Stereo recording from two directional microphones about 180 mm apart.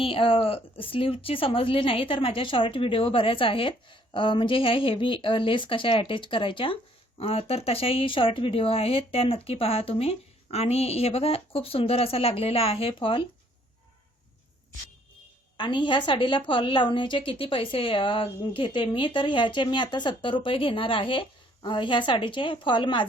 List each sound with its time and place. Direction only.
0.0 s a woman's voice: 30° left (ahead or behind)
15.5 s a woman's voice: 25° left (ahead or behind)